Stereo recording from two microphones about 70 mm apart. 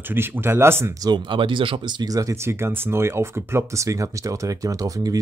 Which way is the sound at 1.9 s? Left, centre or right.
Right.